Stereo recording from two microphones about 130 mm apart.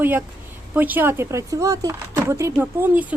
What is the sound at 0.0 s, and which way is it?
Speech, 15° right (ahead or behind).